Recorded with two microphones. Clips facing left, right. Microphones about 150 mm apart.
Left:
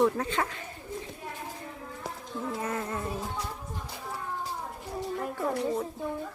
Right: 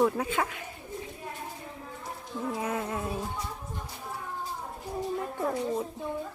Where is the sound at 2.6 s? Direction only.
10° right (ahead or behind).